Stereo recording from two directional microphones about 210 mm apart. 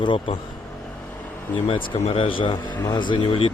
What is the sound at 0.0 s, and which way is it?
Speech, 20° left (ahead or behind).